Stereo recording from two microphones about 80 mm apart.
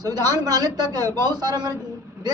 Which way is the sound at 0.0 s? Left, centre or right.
Right.